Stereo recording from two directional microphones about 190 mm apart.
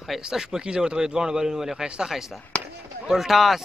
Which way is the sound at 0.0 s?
Centre (ahead or behind).